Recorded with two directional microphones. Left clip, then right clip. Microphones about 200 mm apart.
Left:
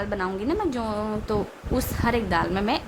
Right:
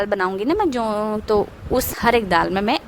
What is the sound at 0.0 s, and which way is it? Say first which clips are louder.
A woman's voice: right 7 dB; 40° right (ahead or behind).